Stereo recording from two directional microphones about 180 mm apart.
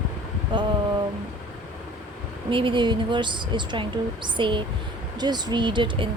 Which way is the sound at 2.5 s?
30° right (ahead or behind).